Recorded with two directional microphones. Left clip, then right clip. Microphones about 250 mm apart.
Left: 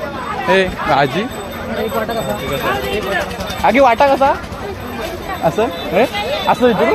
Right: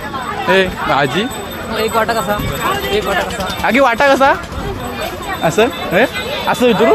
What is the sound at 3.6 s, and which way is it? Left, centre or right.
Speech, centre.